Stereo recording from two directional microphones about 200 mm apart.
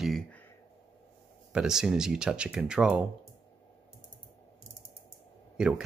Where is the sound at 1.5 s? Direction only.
5° right (ahead or behind).